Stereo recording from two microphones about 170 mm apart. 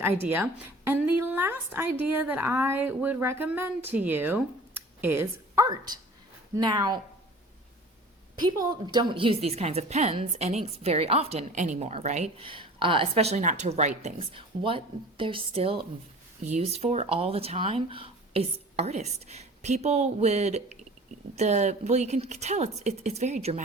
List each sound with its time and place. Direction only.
0.0 s a woman's voice: 10° right (ahead or behind)
8.4 s a woman's voice: 25° right (ahead or behind); by 23.6 s 40° right (ahead or behind)